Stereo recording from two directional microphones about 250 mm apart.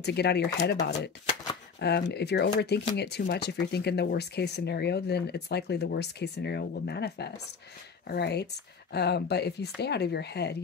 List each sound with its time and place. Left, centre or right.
0.0 s speech: left